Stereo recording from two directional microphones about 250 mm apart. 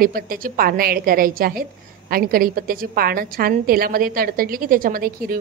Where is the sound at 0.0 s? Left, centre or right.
Right.